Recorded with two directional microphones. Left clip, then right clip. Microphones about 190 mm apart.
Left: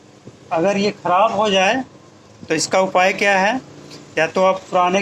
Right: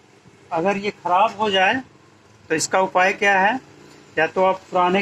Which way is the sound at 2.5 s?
20° left (ahead or behind).